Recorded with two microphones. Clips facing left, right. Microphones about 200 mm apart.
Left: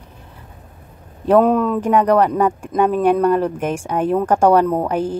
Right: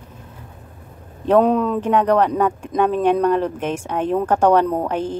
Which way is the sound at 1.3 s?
5° left (ahead or behind).